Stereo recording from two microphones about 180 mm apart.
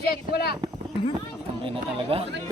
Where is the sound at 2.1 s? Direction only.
30° right (ahead or behind).